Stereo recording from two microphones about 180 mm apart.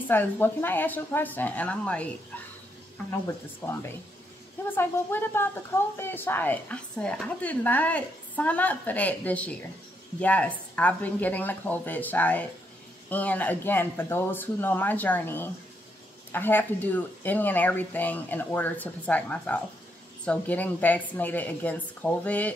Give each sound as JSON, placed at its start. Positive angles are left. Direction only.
{"t": 0.1, "sound": "a woman's voice", "side_deg": 10}
{"t": 3.6, "sound": "a woman's voice", "side_deg": 10}